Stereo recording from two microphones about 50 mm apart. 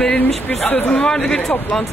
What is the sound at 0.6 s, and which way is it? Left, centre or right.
Speech, left.